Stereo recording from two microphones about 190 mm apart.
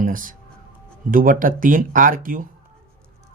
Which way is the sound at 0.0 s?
45° right (ahead or behind).